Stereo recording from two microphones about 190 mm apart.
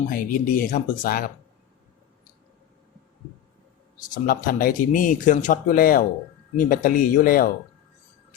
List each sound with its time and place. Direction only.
0.1 s speech: 45° left (ahead or behind)
4.1 s speech: 45° left (ahead or behind)